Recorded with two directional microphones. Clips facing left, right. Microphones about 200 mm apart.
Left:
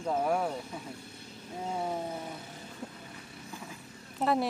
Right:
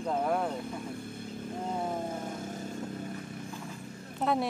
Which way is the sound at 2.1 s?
45° right (ahead or behind).